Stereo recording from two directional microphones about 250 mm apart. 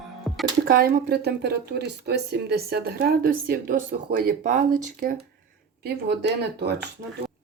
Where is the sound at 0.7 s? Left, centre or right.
Right.